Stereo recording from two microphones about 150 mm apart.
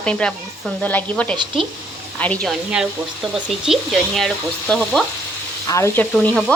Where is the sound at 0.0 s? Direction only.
5° left (ahead or behind).